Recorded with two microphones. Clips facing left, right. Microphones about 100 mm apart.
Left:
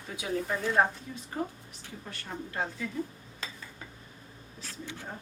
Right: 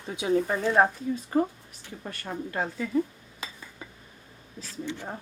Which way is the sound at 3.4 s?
15° right (ahead or behind).